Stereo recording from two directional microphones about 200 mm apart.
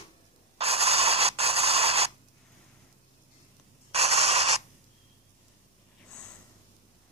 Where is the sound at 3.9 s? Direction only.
30° right (ahead or behind).